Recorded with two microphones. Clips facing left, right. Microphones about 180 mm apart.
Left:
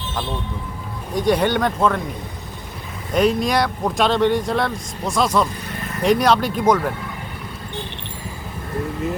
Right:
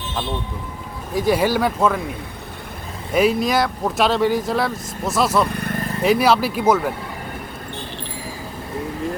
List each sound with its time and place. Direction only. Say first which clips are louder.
1.1 s speech: even; 5° right (ahead or behind)
3.1 s speech: even; 5° right (ahead or behind)
5.5 s vehicle: right 6 dB; 55° right (ahead or behind)
6.0 s speech: even; 5° right (ahead or behind)